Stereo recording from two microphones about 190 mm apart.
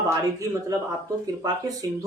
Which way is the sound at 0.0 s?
15° right (ahead or behind).